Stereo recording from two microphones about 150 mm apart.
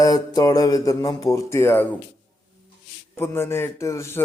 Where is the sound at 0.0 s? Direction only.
25° left (ahead or behind).